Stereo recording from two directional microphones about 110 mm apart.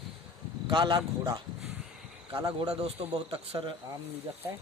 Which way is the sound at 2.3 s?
50° right (ahead or behind).